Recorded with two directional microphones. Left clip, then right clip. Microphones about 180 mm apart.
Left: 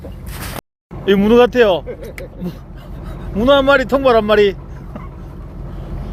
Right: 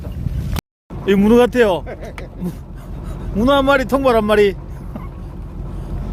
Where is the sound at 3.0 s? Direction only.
Centre (ahead or behind).